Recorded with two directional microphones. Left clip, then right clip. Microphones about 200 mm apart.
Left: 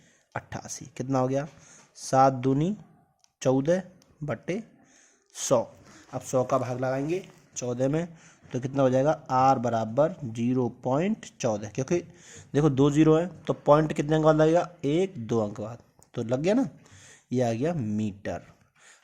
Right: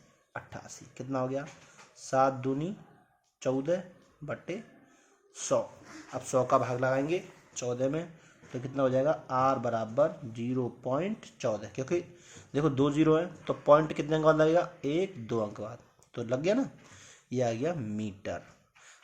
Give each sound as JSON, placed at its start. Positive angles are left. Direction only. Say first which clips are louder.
{"t": 0.3, "sound": "speech", "louder": "left 6 dB", "side_deg": 40}
{"t": 6.1, "sound": "speech", "louder": "left 1 dB", "side_deg": 30}